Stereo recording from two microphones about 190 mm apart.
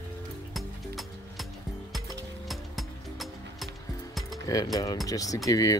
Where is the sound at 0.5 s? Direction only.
Centre (ahead or behind).